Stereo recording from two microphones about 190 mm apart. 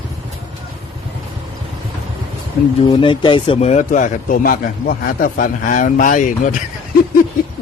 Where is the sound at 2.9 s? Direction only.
25° left (ahead or behind); by 6.6 s 45° left (ahead or behind).